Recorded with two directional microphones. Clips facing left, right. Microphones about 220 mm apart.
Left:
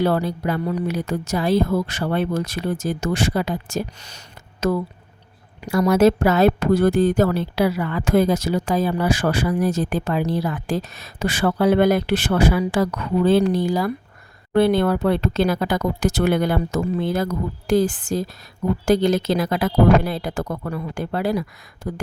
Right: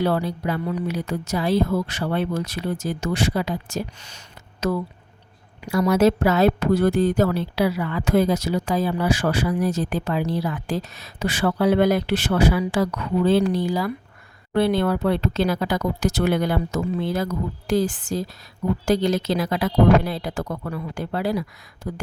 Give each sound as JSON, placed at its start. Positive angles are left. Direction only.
{"t": 0.0, "sound": "speech", "side_deg": 45}
{"t": 5.5, "sound": "speech", "side_deg": 45}